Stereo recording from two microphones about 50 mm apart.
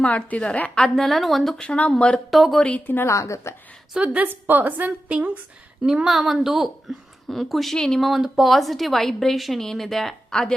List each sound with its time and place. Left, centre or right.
0.0 s a woman's voice: left
0.8 s a woman's voice: centre
1.6 s a woman's voice: left
2.3 s a woman's voice: centre
2.7 s a woman's voice: left
3.1 s a woman's voice: left
4.0 s a woman's voice: right
4.3 s a woman's voice: right
5.8 s a woman's voice: centre
6.1 s a woman's voice: centre